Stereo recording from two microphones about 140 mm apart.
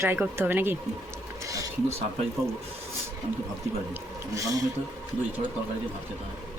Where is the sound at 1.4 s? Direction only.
25° right (ahead or behind).